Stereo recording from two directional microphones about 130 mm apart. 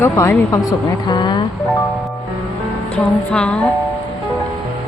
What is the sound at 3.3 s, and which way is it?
Speech, 10° left (ahead or behind).